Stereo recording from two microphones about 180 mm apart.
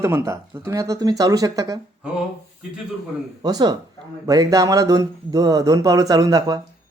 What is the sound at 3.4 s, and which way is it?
Speech, 20° right (ahead or behind).